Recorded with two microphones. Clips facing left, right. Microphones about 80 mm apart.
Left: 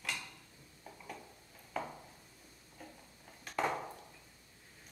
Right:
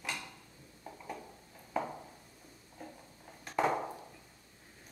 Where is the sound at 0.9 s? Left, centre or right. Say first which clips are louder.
Right 5 dB; centre.